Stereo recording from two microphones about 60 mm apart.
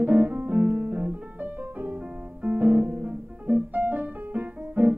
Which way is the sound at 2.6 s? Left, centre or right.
Right.